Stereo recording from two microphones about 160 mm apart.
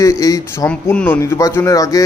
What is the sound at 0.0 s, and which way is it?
Speech, 20° left (ahead or behind).